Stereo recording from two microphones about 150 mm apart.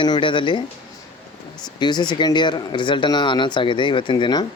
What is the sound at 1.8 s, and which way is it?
Speech, 30° left (ahead or behind).